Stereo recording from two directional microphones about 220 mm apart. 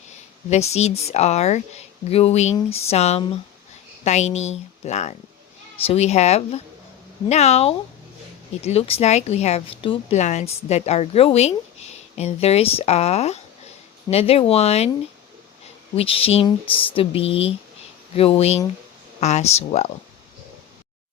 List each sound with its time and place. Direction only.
0.5 s a woman's voice: 30° left (ahead or behind)
16.0 s a woman's voice: 25° left (ahead or behind)